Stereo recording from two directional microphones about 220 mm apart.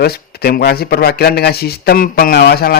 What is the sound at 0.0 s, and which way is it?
Speech, 45° left (ahead or behind).